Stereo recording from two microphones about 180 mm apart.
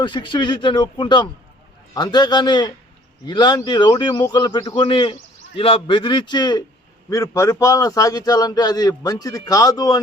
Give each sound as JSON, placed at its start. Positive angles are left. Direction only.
{"t": 0.0, "sound": "a man's voice", "side_deg": 25}